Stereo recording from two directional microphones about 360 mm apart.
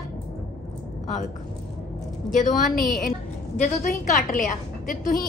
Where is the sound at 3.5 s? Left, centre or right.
Left.